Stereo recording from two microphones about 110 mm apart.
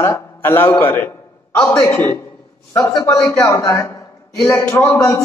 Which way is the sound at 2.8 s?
35° left (ahead or behind).